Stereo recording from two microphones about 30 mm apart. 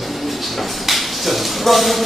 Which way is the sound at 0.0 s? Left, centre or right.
Centre.